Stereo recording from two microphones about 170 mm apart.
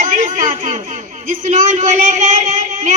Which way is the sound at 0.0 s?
50° right (ahead or behind).